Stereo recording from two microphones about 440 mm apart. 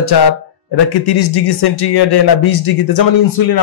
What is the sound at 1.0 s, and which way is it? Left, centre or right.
Speech, left.